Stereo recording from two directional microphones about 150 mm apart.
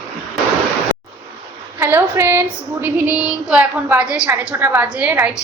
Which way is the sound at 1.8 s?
15° right (ahead or behind).